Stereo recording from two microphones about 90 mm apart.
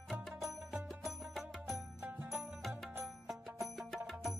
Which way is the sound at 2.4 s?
5° right (ahead or behind).